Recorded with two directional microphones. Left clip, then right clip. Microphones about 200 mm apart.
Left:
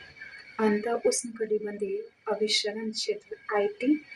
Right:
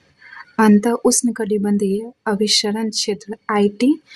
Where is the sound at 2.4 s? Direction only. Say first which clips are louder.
Right 10 dB; 55° right (ahead or behind).